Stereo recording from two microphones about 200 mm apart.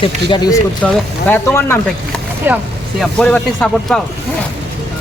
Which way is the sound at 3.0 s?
5° left (ahead or behind).